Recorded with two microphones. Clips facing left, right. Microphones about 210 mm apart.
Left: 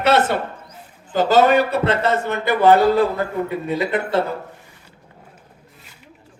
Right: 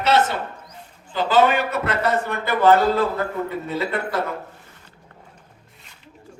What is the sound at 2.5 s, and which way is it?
A man's voice, 15° left (ahead or behind).